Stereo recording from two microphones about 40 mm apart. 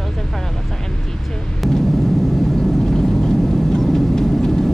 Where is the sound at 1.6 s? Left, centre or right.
Centre.